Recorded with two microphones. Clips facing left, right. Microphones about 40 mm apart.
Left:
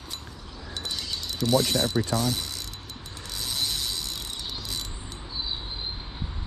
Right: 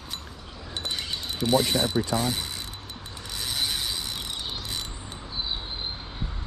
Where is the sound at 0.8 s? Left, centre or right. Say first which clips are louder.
Right 2 dB; right.